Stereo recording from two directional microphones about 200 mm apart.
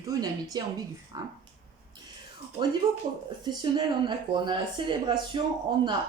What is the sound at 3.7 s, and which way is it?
Speech, 25° right (ahead or behind).